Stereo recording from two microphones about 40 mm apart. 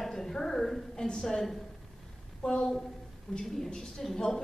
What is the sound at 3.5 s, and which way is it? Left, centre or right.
Speech, centre.